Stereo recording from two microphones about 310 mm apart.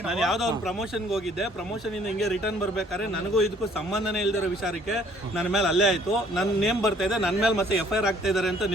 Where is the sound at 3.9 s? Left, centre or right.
Centre.